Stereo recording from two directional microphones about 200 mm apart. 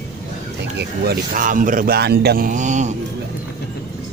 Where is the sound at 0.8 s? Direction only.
45° right (ahead or behind).